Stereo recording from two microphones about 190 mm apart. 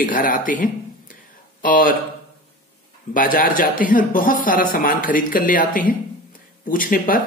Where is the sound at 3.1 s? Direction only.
50° left (ahead or behind).